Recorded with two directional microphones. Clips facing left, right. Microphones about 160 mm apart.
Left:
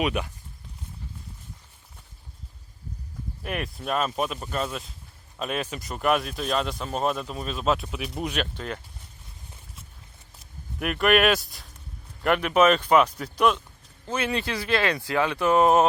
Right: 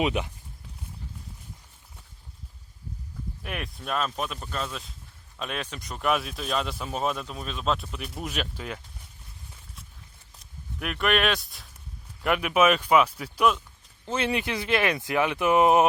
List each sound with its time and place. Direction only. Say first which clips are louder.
0.0 s speech: even; 20° right (ahead or behind)
3.4 s speech: left 5 dB; centre (ahead or behind)
10.8 s speech: left 4 dB; centre (ahead or behind)
14.1 s speech: even; 25° right (ahead or behind)